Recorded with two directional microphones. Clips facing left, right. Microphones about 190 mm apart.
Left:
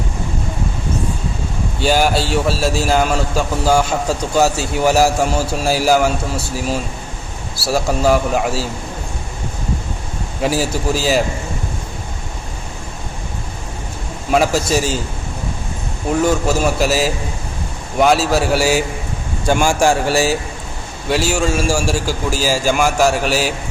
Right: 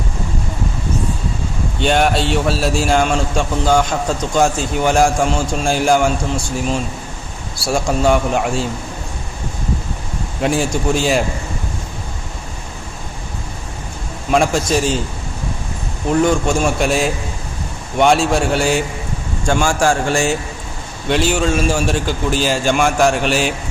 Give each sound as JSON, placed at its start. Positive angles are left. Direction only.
{"t": 1.8, "sound": "a man's voice", "side_deg": 0}
{"t": 10.4, "sound": "a man's voice", "side_deg": 5}
{"t": 14.3, "sound": "a man's voice", "side_deg": 5}
{"t": 16.2, "sound": "a man's voice", "side_deg": 5}